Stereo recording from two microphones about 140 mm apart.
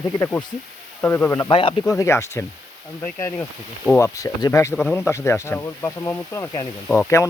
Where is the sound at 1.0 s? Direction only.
15° left (ahead or behind).